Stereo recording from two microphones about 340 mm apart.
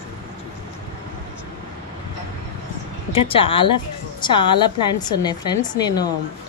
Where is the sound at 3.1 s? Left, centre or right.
Centre.